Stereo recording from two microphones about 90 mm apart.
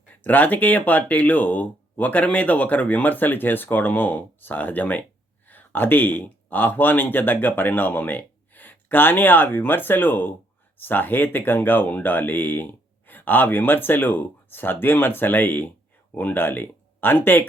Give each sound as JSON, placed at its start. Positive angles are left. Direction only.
{"t": 0.1, "sound": "speech", "side_deg": 20}